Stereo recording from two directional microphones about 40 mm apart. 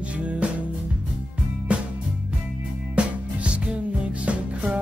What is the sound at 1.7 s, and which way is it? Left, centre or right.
Music, right.